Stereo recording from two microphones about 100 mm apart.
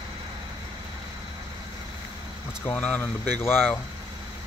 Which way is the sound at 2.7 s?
15° left (ahead or behind).